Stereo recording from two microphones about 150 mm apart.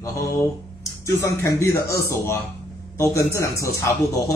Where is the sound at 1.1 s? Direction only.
20° left (ahead or behind).